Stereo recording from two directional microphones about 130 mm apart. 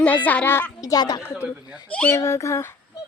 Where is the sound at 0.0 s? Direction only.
15° left (ahead or behind); by 1.2 s 30° left (ahead or behind).